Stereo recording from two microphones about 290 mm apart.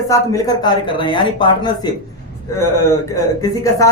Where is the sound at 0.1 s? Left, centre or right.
Centre.